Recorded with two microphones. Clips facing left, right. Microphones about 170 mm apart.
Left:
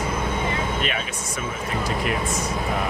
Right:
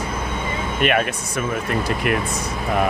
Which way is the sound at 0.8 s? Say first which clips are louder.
Right 8 dB; 60° right (ahead or behind).